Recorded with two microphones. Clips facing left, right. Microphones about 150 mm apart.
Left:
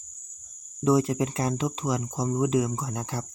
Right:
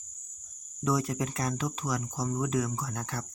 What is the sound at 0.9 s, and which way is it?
Speech, 25° left (ahead or behind).